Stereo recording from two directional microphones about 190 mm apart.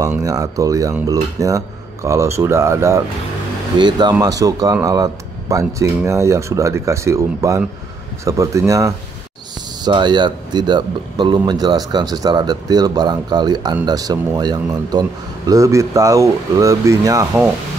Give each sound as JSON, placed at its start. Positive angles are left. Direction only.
{"t": 0.2, "sound": "speech", "side_deg": -20}